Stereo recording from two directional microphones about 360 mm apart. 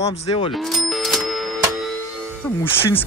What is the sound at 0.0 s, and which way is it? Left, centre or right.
Speech, centre.